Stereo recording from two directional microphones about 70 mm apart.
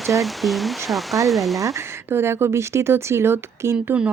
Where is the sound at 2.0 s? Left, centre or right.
Right.